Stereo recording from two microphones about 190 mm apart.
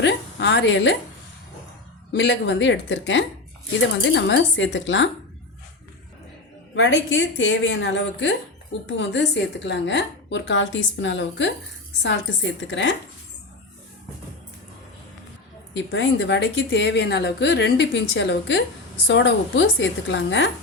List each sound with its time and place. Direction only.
0.0 s a woman's voice: 65° left (ahead or behind)
2.1 s a woman's voice: 70° left (ahead or behind)
6.7 s a woman's voice: 75° left (ahead or behind)
15.7 s a woman's voice: 70° left (ahead or behind)